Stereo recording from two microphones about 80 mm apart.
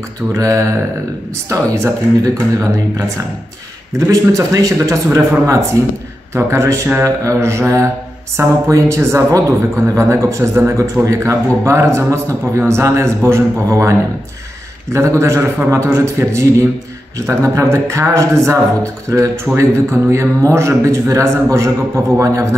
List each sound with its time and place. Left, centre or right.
0.3 s mantra: right
1.5 s a man's voice: right